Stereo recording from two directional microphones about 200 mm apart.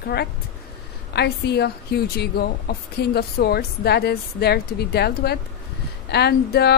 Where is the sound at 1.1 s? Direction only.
55° left (ahead or behind).